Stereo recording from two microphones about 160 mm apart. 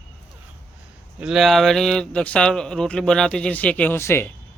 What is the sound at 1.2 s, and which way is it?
A man's voice, centre (ahead or behind).